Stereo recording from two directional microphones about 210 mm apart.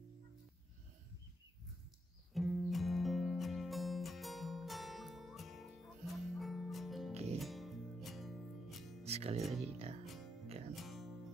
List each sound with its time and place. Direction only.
2.3 s music: centre (ahead or behind)
9.0 s music: 30° right (ahead or behind)
9.6 s speech: 30° right (ahead or behind)
10.0 s music: centre (ahead or behind)